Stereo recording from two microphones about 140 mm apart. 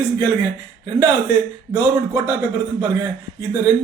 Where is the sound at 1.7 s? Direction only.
15° right (ahead or behind).